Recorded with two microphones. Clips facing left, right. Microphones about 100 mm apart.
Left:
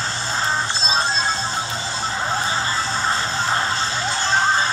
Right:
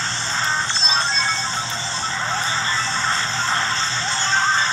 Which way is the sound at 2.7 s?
10° left (ahead or behind).